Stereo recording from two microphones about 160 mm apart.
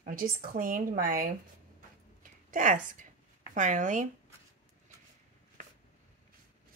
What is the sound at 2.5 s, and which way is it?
Speech, 55° right (ahead or behind).